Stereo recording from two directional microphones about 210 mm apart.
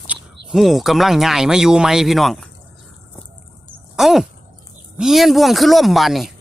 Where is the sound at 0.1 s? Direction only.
5° right (ahead or behind).